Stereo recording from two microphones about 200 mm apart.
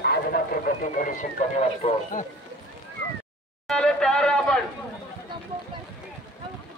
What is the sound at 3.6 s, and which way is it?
Speech, 5° left (ahead or behind).